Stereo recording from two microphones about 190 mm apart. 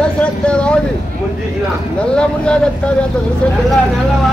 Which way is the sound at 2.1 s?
5° left (ahead or behind).